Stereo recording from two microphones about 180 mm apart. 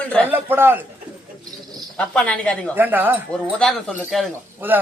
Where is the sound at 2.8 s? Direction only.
10° right (ahead or behind).